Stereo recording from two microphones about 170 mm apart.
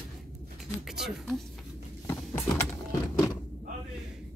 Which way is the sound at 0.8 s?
Centre (ahead or behind).